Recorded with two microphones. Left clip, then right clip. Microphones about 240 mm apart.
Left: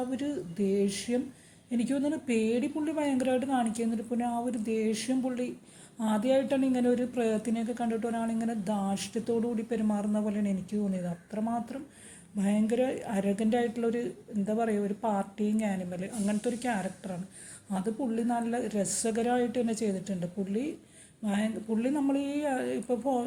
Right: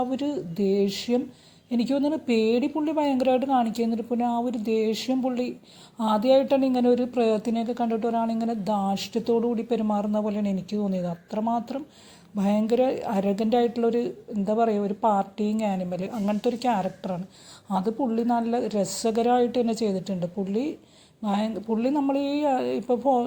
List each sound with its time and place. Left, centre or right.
0.1 s speech: right